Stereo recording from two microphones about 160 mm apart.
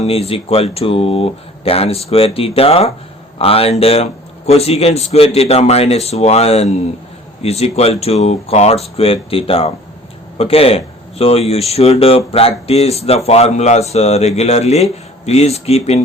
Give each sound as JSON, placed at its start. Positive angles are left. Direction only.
{"t": 0.0, "sound": "speech", "side_deg": 40}